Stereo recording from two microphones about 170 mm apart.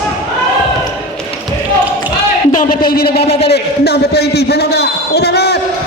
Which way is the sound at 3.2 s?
35° left (ahead or behind).